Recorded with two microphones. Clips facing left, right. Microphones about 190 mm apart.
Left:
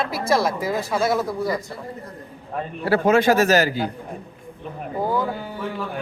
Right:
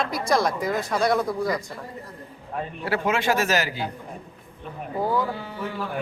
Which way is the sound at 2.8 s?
40° left (ahead or behind).